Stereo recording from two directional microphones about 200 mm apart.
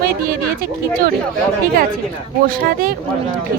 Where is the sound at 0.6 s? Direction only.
45° right (ahead or behind).